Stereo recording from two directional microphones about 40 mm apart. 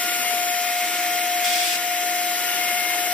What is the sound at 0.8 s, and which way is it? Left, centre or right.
Vacuum cleaner, left.